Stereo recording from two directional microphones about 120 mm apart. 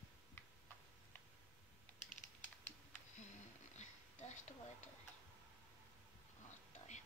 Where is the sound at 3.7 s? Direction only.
75° left (ahead or behind).